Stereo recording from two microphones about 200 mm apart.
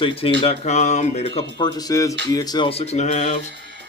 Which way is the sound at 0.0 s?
25° left (ahead or behind).